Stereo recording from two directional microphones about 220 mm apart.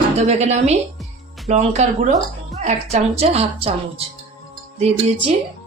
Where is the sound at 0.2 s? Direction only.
30° right (ahead or behind).